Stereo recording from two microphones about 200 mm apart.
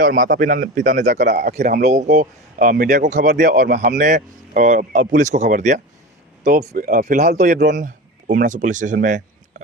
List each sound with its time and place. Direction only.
0.0 s a man's voice: 40° right (ahead or behind)
6.4 s speech: 50° right (ahead or behind)